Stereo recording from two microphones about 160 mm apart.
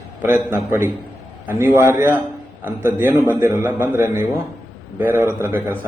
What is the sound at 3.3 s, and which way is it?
A man's voice, 15° right (ahead or behind).